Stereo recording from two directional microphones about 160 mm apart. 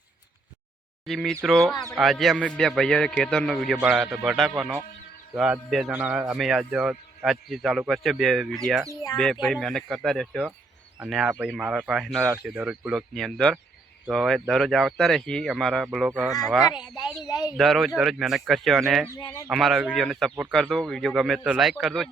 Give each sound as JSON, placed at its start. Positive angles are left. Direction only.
{"t": 1.0, "sound": "speech", "side_deg": 0}
{"t": 17.2, "sound": "speech", "side_deg": 25}
{"t": 17.6, "sound": "speech", "side_deg": 0}